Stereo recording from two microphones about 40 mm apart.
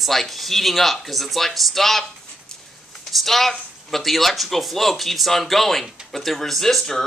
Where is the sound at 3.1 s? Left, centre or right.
Centre.